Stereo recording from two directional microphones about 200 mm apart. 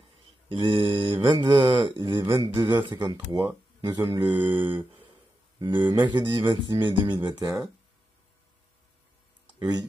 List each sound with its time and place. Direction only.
0.5 s speech: 25° right (ahead or behind)
9.6 s speech: 20° right (ahead or behind)